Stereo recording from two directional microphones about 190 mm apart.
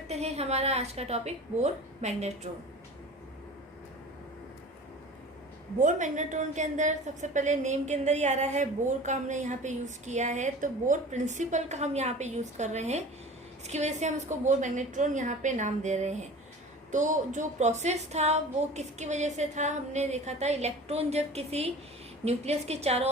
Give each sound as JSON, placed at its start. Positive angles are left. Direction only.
{"t": 0.1, "sound": "a woman's voice", "side_deg": -35}
{"t": 5.8, "sound": "a woman's voice", "side_deg": -40}